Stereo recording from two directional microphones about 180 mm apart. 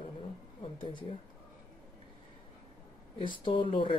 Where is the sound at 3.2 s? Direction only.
30° left (ahead or behind).